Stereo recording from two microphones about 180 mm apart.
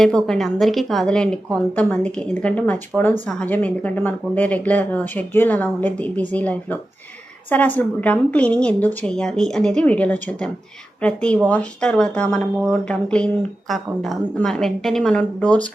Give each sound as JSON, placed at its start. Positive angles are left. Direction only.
{"t": 0.0, "sound": "a woman's voice", "side_deg": 5}